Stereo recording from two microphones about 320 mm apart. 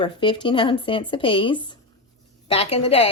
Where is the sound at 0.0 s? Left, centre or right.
Centre.